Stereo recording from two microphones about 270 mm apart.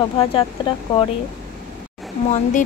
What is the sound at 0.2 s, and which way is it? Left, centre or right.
Speech, centre.